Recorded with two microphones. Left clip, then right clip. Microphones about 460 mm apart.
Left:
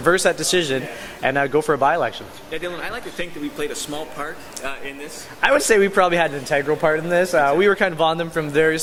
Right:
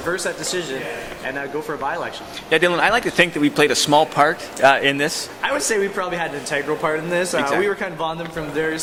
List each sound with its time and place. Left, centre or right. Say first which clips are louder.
0.0 s speech: left 6 dB; left
2.5 s speech: right 12 dB; right
5.4 s speech: left 5 dB; left